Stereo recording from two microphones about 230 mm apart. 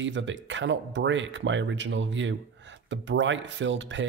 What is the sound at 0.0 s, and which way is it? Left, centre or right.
Speech, right.